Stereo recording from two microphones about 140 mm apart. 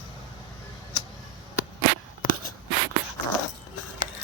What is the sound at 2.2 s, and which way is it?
Writing, 80° left.